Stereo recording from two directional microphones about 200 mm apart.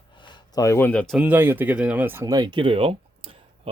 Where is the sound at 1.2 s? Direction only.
10° right (ahead or behind).